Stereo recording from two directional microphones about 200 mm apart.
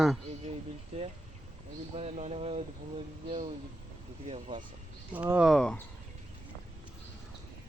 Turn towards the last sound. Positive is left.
turn(degrees=5)  # may be behind; listen again after turning